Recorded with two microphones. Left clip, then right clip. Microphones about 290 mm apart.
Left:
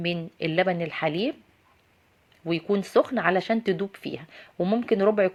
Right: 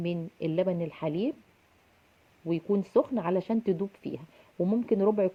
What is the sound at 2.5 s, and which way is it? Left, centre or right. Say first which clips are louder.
Speech: left 3 dB; left.